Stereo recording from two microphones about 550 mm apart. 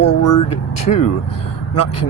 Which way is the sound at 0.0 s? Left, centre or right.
Left.